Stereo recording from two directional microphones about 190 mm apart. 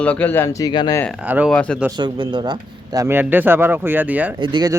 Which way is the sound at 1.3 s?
10° right (ahead or behind).